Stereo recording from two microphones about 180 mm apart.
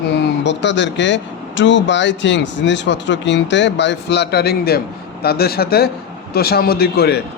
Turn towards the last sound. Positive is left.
turn(degrees=60)  # may be behind; listen again after turning